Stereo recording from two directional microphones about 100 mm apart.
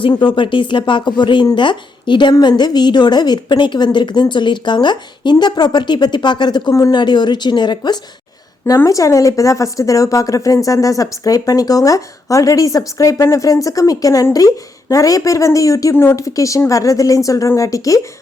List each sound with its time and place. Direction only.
0.1 s a woman's voice: 50° left (ahead or behind)
8.6 s a woman's voice: 35° left (ahead or behind)